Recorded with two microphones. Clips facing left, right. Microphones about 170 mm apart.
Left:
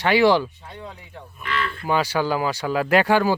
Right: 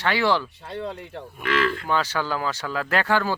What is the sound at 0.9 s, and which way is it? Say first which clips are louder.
Speech: right 5 dB; 80° right.